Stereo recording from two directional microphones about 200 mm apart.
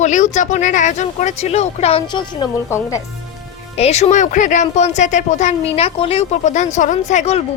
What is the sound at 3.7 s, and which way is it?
Speech, 35° left (ahead or behind).